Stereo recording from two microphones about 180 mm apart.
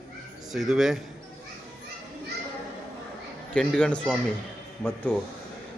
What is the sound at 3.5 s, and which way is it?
Speech, 5° left (ahead or behind).